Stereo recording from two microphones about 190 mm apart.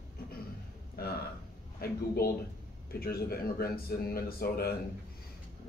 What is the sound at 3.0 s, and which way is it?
Speech, 55° left (ahead or behind).